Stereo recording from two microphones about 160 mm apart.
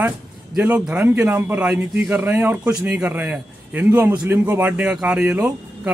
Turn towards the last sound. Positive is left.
turn(degrees=-10)  # may be behind; listen again after turning